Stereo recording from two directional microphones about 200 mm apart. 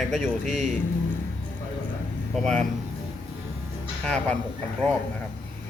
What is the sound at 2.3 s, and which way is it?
Speech, 5° left (ahead or behind).